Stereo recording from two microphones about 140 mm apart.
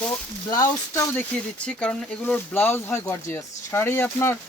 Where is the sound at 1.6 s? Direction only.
10° left (ahead or behind).